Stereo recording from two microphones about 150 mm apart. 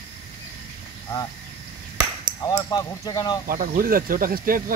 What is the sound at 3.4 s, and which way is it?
Speech, 70° right (ahead or behind).